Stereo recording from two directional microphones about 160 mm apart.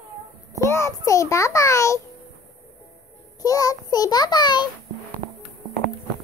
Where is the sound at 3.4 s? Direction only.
20° left (ahead or behind).